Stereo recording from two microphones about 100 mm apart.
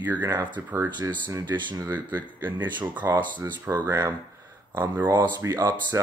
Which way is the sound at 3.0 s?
30° right (ahead or behind).